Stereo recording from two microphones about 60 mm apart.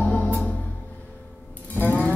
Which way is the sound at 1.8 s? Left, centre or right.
Left.